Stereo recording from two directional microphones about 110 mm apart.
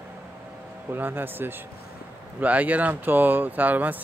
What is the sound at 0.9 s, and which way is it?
Speech, 20° right (ahead or behind).